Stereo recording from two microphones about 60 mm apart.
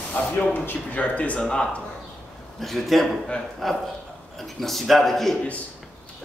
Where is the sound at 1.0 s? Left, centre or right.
Left.